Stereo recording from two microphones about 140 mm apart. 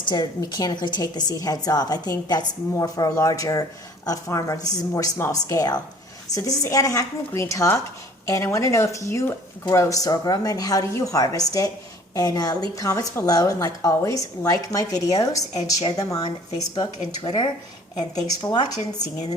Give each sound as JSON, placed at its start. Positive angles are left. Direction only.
{"t": 0.1, "sound": "a woman's voice", "side_deg": 30}